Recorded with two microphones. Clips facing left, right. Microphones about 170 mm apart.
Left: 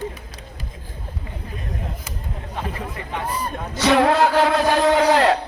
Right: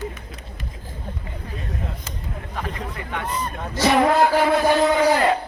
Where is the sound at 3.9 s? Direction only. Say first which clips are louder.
Left 1 dB; 85° left.